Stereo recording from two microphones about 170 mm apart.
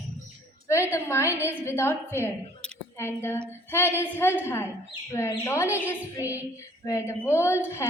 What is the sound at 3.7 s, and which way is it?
A woman's voice, 15° left (ahead or behind).